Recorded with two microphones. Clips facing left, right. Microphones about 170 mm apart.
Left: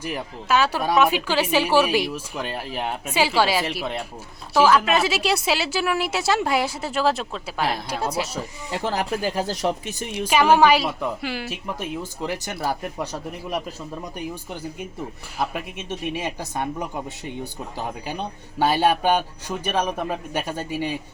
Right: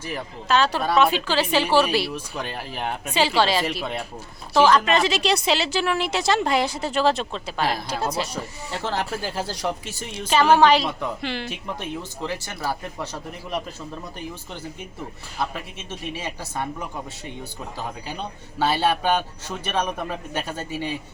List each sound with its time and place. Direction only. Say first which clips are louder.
0.0 s speech: left 2 dB; 10° left (ahead or behind)